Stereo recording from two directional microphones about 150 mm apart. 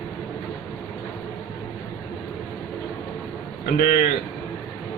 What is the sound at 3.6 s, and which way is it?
Speech, 90° left.